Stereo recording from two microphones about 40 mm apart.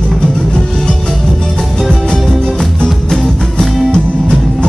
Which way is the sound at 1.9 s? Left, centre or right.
Centre.